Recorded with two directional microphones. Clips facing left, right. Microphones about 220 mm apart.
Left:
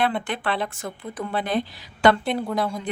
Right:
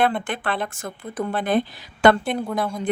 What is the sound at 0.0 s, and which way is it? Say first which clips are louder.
Speech: right 2 dB; 50° right (ahead or behind).